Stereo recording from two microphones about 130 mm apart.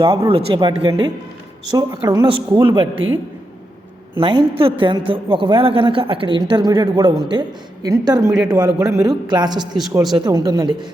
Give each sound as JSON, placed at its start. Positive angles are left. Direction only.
{"t": 0.0, "sound": "speech", "side_deg": -25}
{"t": 0.3, "sound": "a woman's voice", "side_deg": -40}
{"t": 4.2, "sound": "a woman's voice", "side_deg": -40}
{"t": 9.6, "sound": "speech", "side_deg": -5}
{"t": 10.2, "sound": "a woman's voice", "side_deg": -30}